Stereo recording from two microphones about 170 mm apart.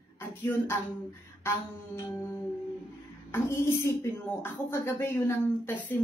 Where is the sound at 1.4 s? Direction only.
15° left (ahead or behind).